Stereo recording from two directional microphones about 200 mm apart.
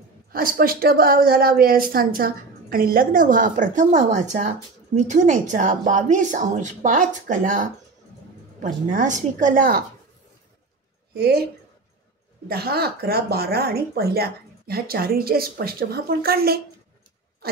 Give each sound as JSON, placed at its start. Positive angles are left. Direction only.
{"t": 0.3, "sound": "a woman's voice", "side_deg": -45}
{"t": 11.1, "sound": "a woman's voice", "side_deg": -50}
{"t": 12.4, "sound": "a woman's voice", "side_deg": -50}